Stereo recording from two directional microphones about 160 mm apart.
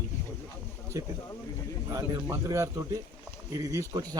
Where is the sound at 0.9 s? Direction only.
20° right (ahead or behind).